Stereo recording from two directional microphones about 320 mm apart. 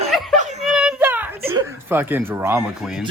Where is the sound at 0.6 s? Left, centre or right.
Centre.